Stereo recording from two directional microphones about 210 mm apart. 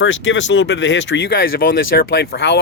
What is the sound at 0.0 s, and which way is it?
Speech, 65° left (ahead or behind).